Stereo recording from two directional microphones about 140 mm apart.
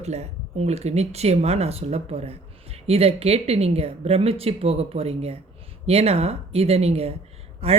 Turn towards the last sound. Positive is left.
turn(degrees=-45)  # may be behind; listen again after turning